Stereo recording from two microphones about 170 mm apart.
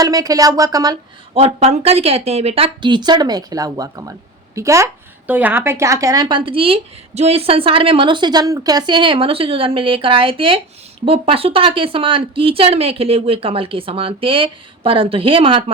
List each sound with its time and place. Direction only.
0.0 s a woman's voice: 20° right (ahead or behind)
1.3 s a woman's voice: 35° right (ahead or behind)